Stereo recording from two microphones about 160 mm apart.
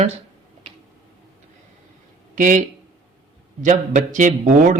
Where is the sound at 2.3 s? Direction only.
55° right (ahead or behind).